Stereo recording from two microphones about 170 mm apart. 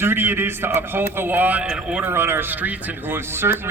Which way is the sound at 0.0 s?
15° right (ahead or behind).